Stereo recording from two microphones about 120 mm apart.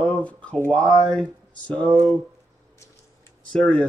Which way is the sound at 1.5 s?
10° left (ahead or behind).